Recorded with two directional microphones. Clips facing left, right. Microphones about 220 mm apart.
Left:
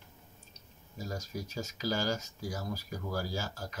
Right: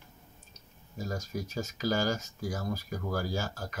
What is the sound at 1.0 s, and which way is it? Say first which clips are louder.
Speech: right 3 dB; 55° right (ahead or behind).